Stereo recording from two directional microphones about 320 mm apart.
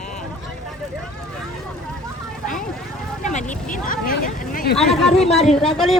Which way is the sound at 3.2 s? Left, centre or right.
Left.